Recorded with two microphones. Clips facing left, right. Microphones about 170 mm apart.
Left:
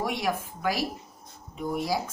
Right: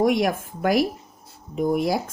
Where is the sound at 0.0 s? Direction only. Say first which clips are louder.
Right 9 dB; 50° right (ahead or behind).